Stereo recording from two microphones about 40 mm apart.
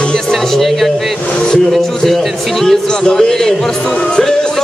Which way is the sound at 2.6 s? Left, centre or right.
Centre.